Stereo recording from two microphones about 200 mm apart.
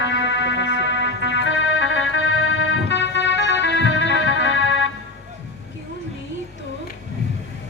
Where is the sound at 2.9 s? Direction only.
65° left (ahead or behind).